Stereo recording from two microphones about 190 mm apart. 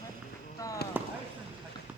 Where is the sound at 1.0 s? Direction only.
10° right (ahead or behind).